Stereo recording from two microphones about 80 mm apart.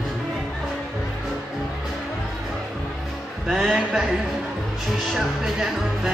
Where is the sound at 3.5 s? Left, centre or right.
Centre.